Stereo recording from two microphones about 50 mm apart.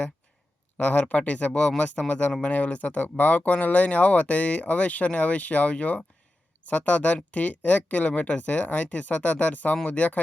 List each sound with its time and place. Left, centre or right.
0.8 s speech: left